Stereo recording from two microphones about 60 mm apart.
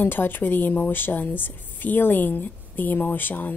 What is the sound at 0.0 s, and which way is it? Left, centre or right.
A woman's voice, left.